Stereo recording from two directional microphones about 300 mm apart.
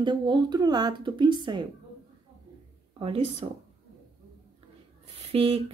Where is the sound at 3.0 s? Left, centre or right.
Centre.